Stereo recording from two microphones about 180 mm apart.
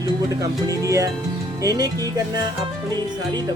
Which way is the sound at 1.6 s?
20° right (ahead or behind).